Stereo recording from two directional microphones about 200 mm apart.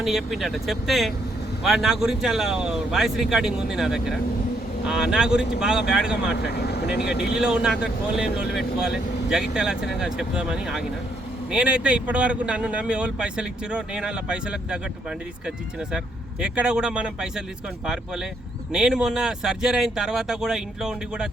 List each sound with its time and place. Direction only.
0.0 s speech: centre (ahead or behind)
6.5 s speech: 55° left (ahead or behind)
7.0 s speech: 5° right (ahead or behind)
16.4 s speech: 5° right (ahead or behind)